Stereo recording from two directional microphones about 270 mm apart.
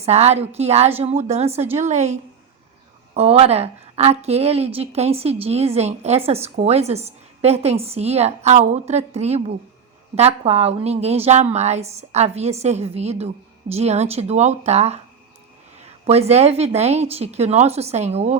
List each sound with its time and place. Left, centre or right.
0.0 s a woman's voice: right
3.2 s a woman's voice: right